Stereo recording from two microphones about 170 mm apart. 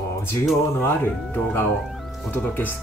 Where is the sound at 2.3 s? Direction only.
10° left (ahead or behind).